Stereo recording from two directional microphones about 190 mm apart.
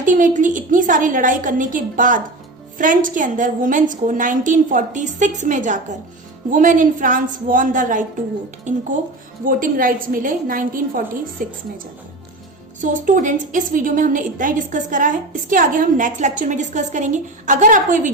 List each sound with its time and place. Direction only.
0.0 s a woman's voice: 45° right (ahead or behind)
12.8 s a woman's voice: 40° right (ahead or behind)